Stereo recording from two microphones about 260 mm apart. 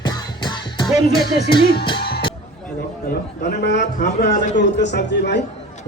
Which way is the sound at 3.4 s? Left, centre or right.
Left.